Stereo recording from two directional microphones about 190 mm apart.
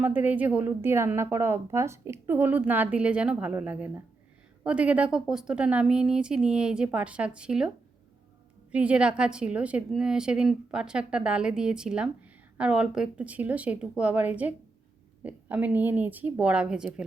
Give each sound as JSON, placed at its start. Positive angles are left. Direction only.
{"t": 0.0, "sound": "a woman's voice", "side_deg": -10}
{"t": 8.7, "sound": "a woman's voice", "side_deg": -5}